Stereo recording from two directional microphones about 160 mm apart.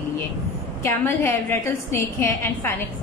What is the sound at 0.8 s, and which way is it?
A woman's voice, 15° left (ahead or behind).